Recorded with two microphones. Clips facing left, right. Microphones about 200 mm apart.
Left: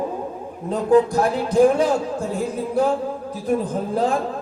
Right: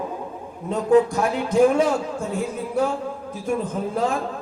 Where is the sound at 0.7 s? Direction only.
35° left (ahead or behind).